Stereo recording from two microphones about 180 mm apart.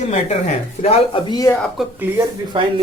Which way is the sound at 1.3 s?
20° left (ahead or behind).